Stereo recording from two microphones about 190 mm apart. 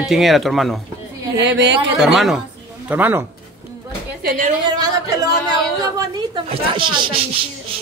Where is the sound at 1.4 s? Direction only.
65° right (ahead or behind).